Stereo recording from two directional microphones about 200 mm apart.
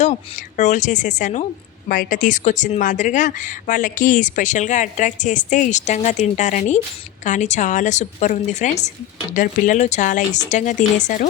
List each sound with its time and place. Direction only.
0.0 s speech: 35° left (ahead or behind)